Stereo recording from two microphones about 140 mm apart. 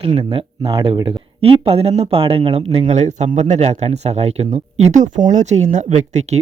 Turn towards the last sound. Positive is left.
turn(degrees=-55)  # may be behind; listen again after turning